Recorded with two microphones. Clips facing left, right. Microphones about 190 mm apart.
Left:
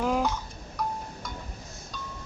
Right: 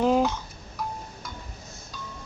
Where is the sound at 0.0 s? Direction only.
25° right (ahead or behind).